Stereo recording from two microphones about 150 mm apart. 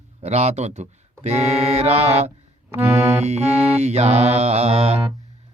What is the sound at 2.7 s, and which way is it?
Music, 15° right (ahead or behind).